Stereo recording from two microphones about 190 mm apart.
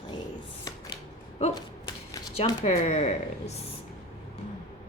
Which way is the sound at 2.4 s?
35° left (ahead or behind).